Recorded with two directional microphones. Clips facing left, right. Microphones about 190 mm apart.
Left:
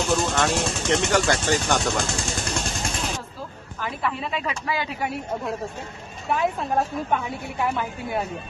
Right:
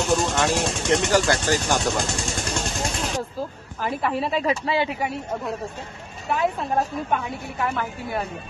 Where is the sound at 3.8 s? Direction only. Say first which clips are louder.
Right 4 dB; 40° right (ahead or behind).